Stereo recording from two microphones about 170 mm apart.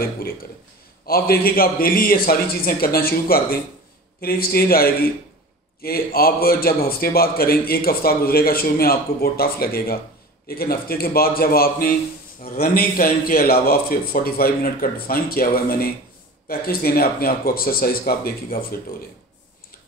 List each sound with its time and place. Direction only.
0.0 s a man's voice: 60° left (ahead or behind)